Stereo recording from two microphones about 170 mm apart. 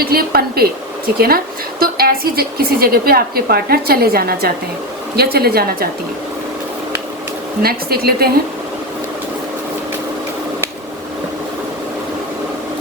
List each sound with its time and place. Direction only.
0.0 s a woman's voice: 65° right (ahead or behind)
7.6 s a woman's voice: 65° right (ahead or behind)